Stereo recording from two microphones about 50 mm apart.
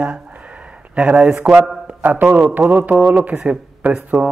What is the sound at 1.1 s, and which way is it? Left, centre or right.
Speech, centre.